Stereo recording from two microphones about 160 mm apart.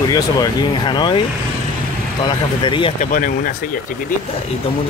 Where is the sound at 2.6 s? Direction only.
30° left (ahead or behind).